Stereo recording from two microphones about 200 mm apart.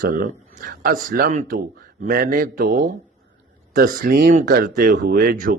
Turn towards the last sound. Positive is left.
turn(degrees=-45)  # may be behind; listen again after turning